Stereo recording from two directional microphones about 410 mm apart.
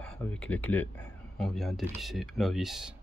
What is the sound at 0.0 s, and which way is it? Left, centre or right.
Speech, centre.